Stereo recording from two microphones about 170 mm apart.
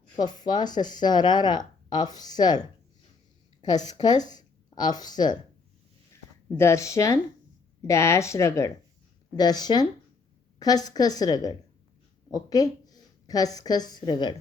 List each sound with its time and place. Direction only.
0.2 s speech: 25° left (ahead or behind)
3.6 s a woman's voice: 25° left (ahead or behind)
6.5 s a woman's voice: 15° left (ahead or behind)